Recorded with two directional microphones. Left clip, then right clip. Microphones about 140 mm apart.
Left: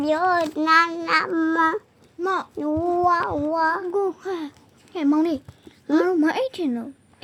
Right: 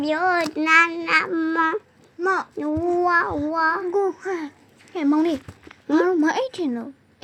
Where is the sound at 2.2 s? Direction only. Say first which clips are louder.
Right 2 dB; 35° left (ahead or behind).